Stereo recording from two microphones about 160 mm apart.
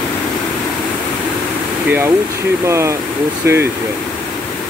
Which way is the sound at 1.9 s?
15° right (ahead or behind).